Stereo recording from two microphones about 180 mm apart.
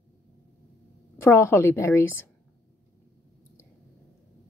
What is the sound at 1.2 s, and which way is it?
A woman's voice, 15° left (ahead or behind).